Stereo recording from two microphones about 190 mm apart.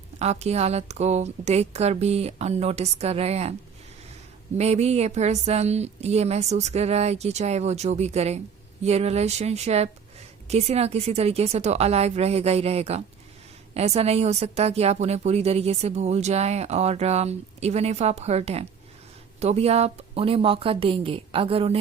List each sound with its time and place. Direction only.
0.2 s a woman's voice: 35° right (ahead or behind)
4.5 s a woman's voice: 35° right (ahead or behind)